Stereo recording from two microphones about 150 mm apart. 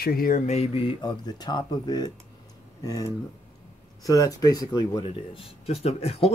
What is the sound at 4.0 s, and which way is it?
Speech, 25° left (ahead or behind).